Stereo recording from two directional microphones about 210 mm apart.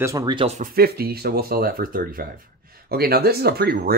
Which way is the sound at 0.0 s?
15° right (ahead or behind).